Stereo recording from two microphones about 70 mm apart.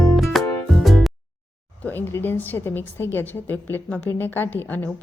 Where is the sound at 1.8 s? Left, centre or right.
Left.